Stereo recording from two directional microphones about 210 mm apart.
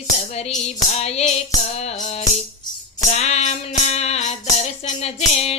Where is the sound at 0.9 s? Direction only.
30° left (ahead or behind).